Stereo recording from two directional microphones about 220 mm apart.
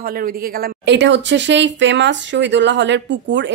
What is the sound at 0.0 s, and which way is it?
A woman's voice, 40° right (ahead or behind).